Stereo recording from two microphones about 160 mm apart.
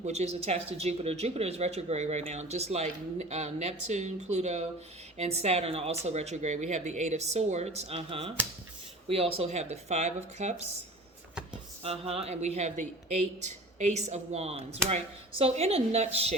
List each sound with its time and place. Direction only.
0.0 s speech: 45° right (ahead or behind)
11.8 s speech: 40° right (ahead or behind)